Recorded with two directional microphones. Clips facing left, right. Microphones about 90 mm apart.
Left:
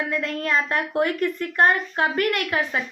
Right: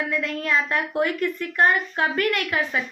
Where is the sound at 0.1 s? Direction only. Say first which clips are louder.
Even; 40° left (ahead or behind).